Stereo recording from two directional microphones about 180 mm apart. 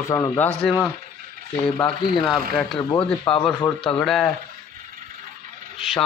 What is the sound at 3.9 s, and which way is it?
Speech, 5° left (ahead or behind).